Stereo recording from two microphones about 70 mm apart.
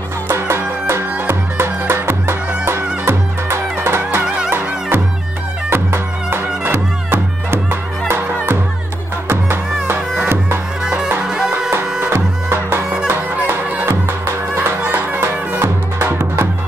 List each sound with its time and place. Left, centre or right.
0.3 s music: right
10.2 s music: right
10.8 s music: centre
12.1 s music: right
13.8 s music: right